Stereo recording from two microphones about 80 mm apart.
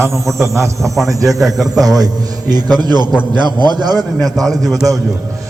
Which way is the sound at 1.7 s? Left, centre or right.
Right.